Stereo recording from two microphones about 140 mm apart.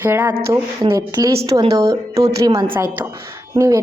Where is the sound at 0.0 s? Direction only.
15° right (ahead or behind).